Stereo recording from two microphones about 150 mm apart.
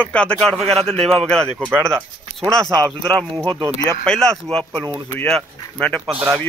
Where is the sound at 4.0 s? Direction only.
5° left (ahead or behind).